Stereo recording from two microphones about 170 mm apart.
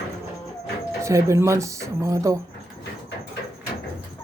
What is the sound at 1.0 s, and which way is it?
Speech, 15° right (ahead or behind).